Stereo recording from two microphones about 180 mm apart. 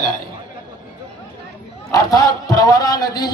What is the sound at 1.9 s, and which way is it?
A man's voice, 20° left (ahead or behind).